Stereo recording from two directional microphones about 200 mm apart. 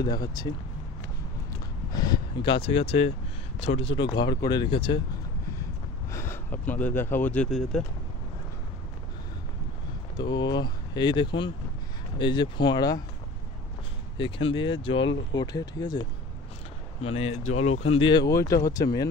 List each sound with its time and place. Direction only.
0.0 s speech: 20° left (ahead or behind)
1.9 s speech: 20° left (ahead or behind)
6.1 s speech: 10° left (ahead or behind)
10.1 s speech: 20° left (ahead or behind)
14.1 s speech: 25° left (ahead or behind)